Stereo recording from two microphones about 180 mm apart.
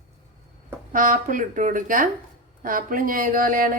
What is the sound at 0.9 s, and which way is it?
Speech, 50° right (ahead or behind).